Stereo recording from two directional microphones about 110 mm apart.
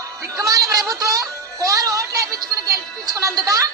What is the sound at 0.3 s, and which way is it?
Speech, 35° right (ahead or behind).